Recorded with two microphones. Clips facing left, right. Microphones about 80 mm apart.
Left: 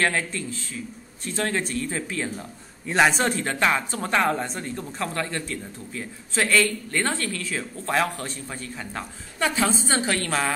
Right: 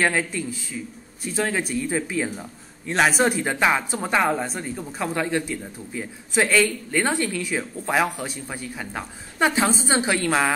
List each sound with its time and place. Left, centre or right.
0.0 s speech: centre
2.9 s a woman's voice: centre